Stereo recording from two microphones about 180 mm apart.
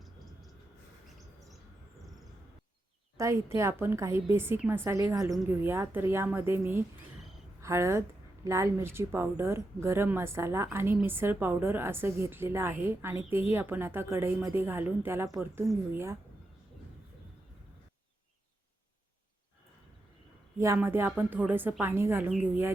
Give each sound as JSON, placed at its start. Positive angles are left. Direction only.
{"t": 3.2, "sound": "a woman's voice", "side_deg": -15}
{"t": 20.6, "sound": "a woman's voice", "side_deg": -15}